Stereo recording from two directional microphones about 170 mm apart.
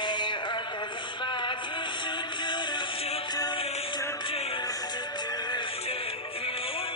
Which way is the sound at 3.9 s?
15° left (ahead or behind).